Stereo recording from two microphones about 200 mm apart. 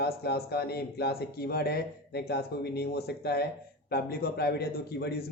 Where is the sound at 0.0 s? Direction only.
50° left (ahead or behind).